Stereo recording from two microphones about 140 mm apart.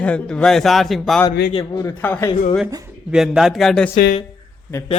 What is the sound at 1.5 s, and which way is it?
Speech, 40° left (ahead or behind).